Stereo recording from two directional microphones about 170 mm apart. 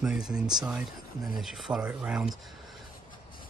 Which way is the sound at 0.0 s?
5° right (ahead or behind).